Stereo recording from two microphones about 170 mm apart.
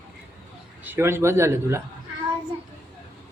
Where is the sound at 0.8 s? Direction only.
15° right (ahead or behind).